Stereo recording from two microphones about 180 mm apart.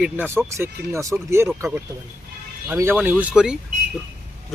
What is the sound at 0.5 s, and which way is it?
Speech, 15° right (ahead or behind).